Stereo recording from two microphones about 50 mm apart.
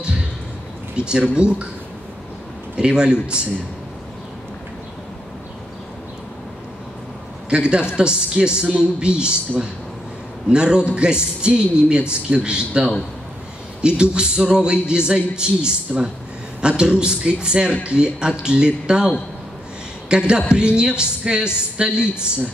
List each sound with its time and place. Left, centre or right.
0.9 s a man's voice: centre
2.7 s a man's voice: centre
7.4 s a man's voice: right
10.5 s a man's voice: centre
20.1 s a woman's voice: centre